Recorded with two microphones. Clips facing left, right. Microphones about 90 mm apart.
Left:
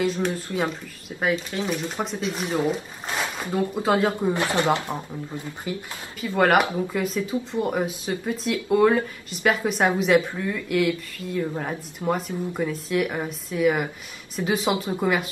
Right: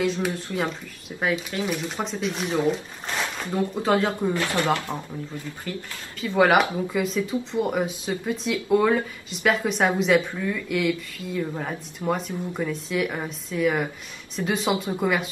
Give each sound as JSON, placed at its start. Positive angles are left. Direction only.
{"t": 0.0, "sound": "speech", "side_deg": 0}
{"t": 4.3, "sound": "speech", "side_deg": 20}
{"t": 6.3, "sound": "speech", "side_deg": -5}